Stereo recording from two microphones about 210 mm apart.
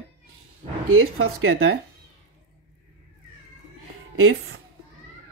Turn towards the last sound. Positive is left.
turn(degrees=-75)  # may be behind; listen again after turning